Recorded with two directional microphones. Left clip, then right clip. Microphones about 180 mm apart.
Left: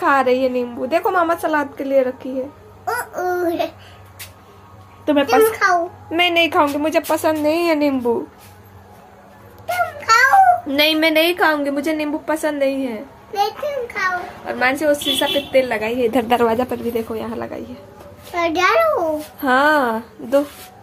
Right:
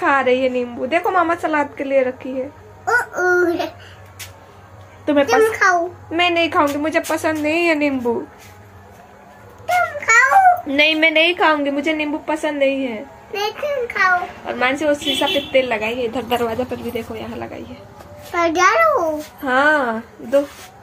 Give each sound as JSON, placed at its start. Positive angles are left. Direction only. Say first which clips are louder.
{"t": 0.0, "sound": "a woman's voice", "louder": "even", "side_deg": 15}
{"t": 2.8, "sound": "speech", "louder": "right 5 dB", "side_deg": 0}
{"t": 5.0, "sound": "a woman's voice", "louder": "right 1 dB", "side_deg": 15}
{"t": 5.3, "sound": "a child's voice", "louder": "left 1 dB", "side_deg": 5}
{"t": 6.0, "sound": "a woman's voice", "louder": "left 2 dB", "side_deg": 20}
{"t": 9.9, "sound": "babbling", "louder": "left 1 dB", "side_deg": 25}
{"t": 10.8, "sound": "a woman's voice", "louder": "right 3 dB", "side_deg": 15}
{"t": 16.0, "sound": "a woman's voice", "louder": "left 4 dB", "side_deg": 50}
{"t": 18.5, "sound": "a child's voice", "louder": "right 1 dB", "side_deg": -5}
{"t": 19.4, "sound": "a woman's voice", "louder": "left 1 dB", "side_deg": 30}